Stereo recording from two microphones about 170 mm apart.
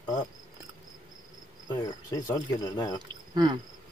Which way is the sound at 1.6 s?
20° left (ahead or behind).